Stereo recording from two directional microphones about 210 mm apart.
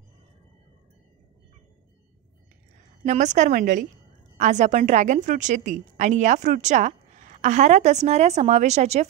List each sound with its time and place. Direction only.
3.0 s a woman's voice: 35° right (ahead or behind)